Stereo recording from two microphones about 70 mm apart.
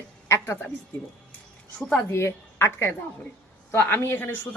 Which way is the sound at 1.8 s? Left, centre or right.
Centre.